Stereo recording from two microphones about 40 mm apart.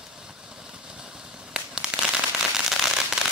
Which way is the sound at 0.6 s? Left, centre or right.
Centre.